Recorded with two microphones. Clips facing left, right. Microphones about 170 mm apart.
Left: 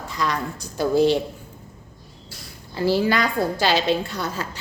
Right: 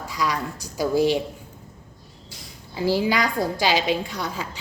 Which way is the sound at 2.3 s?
20° right (ahead or behind).